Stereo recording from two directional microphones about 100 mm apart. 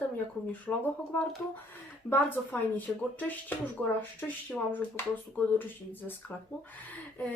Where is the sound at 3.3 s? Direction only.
15° left (ahead or behind).